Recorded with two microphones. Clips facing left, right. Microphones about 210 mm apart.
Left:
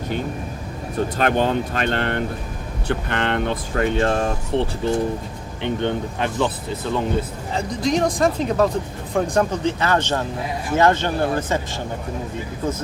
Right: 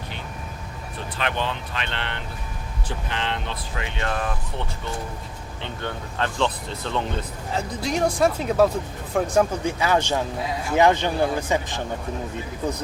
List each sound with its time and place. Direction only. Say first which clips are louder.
0.9 s speech: left 9 dB; 45° left (ahead or behind)
2.8 s speech: left 7 dB; 60° left (ahead or behind)
3.9 s speech: left 7 dB; 30° left (ahead or behind)
5.6 s speech: left 10 dB; 15° left (ahead or behind)
7.5 s speech: left 5 dB; 5° right (ahead or behind)